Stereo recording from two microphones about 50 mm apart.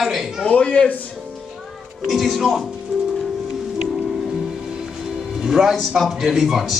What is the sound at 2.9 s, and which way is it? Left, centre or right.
Music, centre.